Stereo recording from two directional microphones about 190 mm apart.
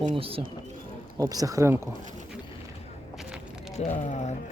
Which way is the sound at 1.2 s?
20° right (ahead or behind).